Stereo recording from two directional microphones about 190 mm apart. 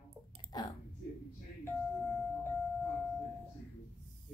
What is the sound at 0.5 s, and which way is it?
Speech, 20° left (ahead or behind).